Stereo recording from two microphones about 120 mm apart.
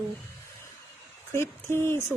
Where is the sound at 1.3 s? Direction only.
20° left (ahead or behind).